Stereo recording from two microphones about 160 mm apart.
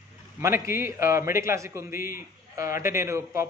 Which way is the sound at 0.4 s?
15° right (ahead or behind).